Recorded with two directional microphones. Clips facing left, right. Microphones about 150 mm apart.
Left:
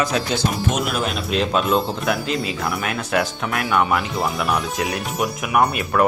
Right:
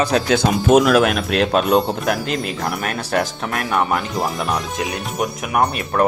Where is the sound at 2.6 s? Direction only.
40° right (ahead or behind).